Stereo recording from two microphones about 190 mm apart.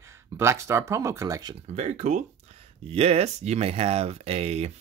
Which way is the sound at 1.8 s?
40° right (ahead or behind).